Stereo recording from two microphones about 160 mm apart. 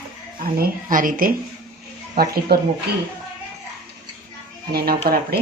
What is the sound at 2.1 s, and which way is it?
Speech, 75° right (ahead or behind).